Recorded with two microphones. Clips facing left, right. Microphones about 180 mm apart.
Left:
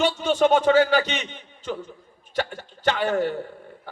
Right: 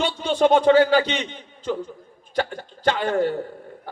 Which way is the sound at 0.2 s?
35° right (ahead or behind).